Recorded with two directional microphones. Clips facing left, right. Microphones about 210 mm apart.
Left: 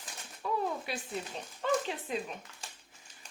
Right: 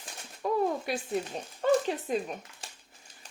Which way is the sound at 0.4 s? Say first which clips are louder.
Right 5 dB; 40° right (ahead or behind).